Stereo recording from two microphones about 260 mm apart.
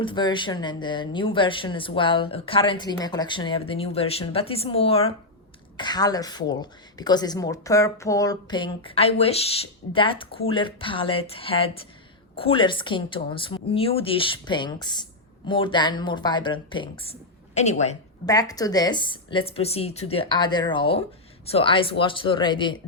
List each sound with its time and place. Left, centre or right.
0.0 s a woman's voice: centre
18.3 s a woman's voice: centre